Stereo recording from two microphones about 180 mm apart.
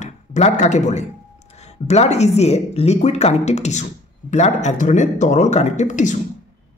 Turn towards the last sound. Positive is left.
turn(degrees=45)  # may be behind; listen again after turning